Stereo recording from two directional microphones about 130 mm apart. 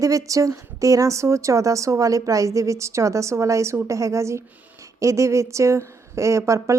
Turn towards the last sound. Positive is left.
turn(degrees=-25)  # may be behind; listen again after turning